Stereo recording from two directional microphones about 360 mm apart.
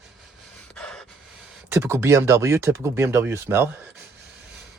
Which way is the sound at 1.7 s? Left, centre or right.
Centre.